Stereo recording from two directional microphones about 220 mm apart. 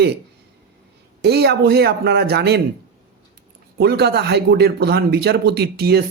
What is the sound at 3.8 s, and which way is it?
Speech, 45° right (ahead or behind).